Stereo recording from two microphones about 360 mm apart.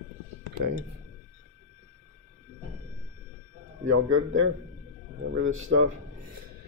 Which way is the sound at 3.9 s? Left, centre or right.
Right.